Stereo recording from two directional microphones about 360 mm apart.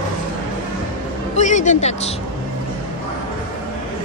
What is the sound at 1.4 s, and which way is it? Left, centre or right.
Speech, centre.